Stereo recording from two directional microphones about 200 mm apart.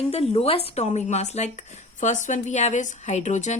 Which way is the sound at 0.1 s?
30° left (ahead or behind).